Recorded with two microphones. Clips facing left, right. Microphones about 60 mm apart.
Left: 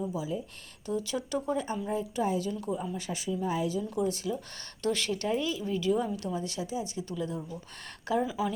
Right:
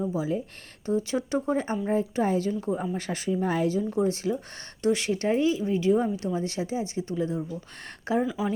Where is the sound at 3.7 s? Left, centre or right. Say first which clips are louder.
Right 5 dB; right.